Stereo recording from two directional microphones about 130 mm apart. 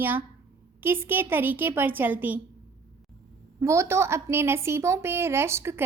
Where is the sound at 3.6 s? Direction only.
20° right (ahead or behind).